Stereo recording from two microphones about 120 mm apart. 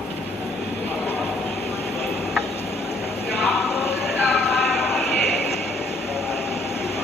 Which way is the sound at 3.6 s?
20° left (ahead or behind).